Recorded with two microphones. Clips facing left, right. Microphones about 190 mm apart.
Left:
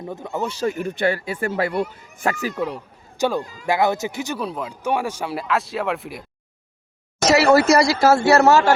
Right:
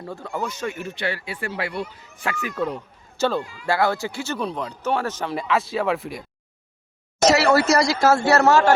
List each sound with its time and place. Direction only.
0.0 s speech: 20° left (ahead or behind)
0.5 s speech: 40° left (ahead or behind)
2.6 s speech: 10° left (ahead or behind)
3.4 s speech: 40° left (ahead or behind)
3.7 s speech: 20° left (ahead or behind)
4.4 s speech: 5° left (ahead or behind)
7.3 s speech: 10° left (ahead or behind)